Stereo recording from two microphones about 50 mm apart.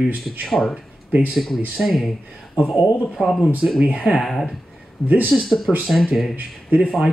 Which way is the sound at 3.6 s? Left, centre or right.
Right.